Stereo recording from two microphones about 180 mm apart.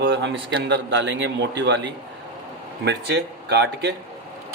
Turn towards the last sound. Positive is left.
turn(degrees=-65)  # may be behind; listen again after turning